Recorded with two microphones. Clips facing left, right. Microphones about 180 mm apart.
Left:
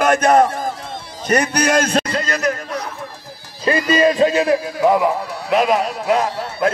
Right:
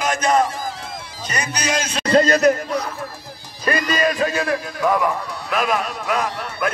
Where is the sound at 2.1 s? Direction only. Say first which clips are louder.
Right 6 dB; 35° right (ahead or behind).